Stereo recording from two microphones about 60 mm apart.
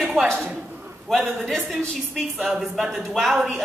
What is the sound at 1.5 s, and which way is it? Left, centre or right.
Speech, centre.